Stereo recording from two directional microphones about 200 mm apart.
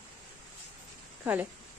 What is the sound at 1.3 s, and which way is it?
Speech, 10° right (ahead or behind).